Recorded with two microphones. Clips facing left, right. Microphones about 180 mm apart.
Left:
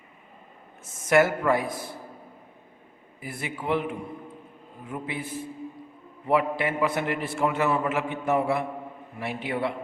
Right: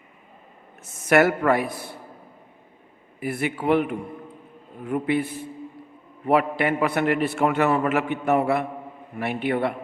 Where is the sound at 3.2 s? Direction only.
65° right (ahead or behind).